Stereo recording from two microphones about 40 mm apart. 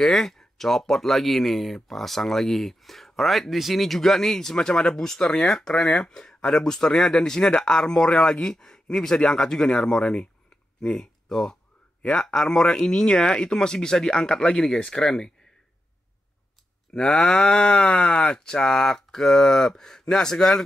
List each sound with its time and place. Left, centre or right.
0.0 s speech: centre
4.6 s speech: left
16.9 s speech: left